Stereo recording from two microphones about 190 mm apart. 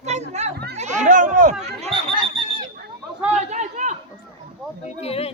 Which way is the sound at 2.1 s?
25° right (ahead or behind).